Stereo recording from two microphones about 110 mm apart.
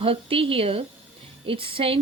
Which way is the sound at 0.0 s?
55° right (ahead or behind).